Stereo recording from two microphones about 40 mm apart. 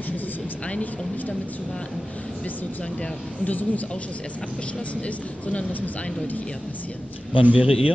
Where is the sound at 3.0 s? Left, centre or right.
Left.